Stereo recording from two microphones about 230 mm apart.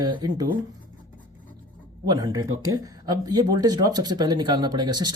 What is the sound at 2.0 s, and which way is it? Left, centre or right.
Speech, centre.